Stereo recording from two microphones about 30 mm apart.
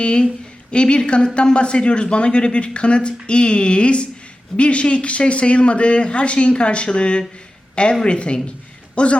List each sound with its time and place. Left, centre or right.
0.0 s a man's voice: left